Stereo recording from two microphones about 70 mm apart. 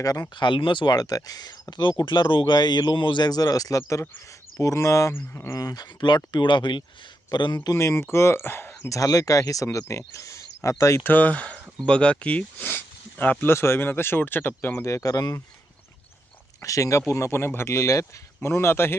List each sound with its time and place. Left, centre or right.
0.0 s speech: left
5.1 s speech: left
5.5 s speech: left
7.8 s speech: left
8.9 s speech: left
11.1 s speech: left
13.5 s speech: left
14.8 s speech: left
16.6 s speech: left